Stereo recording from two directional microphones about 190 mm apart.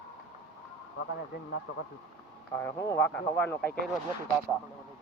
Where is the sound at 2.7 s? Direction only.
20° left (ahead or behind).